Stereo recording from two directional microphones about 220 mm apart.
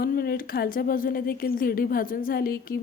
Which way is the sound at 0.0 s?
45° left (ahead or behind).